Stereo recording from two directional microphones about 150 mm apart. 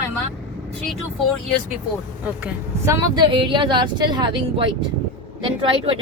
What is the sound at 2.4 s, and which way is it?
Speech, 20° right (ahead or behind).